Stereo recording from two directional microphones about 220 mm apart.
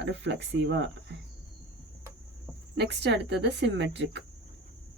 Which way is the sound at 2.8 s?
50° right (ahead or behind).